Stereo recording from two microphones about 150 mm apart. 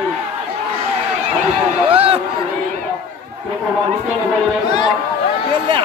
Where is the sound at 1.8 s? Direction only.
35° right (ahead or behind).